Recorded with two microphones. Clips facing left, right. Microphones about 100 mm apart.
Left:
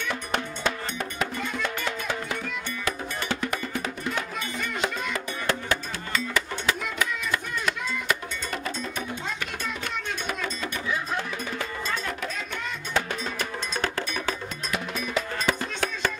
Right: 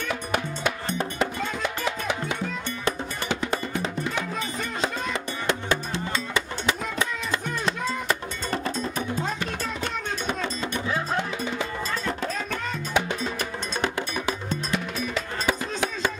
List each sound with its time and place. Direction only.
0.1 s cowbell: 10° right (ahead or behind)
1.6 s music: 15° right (ahead or behind)
4.6 s music: 25° right (ahead or behind)
10.2 s music: 25° right (ahead or behind)
12.9 s cowbell: 20° right (ahead or behind)
15.4 s music: 15° right (ahead or behind)